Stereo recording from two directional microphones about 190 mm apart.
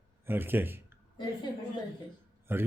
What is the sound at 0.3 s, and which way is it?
Speech, 10° right (ahead or behind).